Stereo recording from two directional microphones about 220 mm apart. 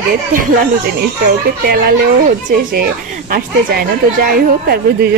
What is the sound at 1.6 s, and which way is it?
A woman's voice, 45° right (ahead or behind).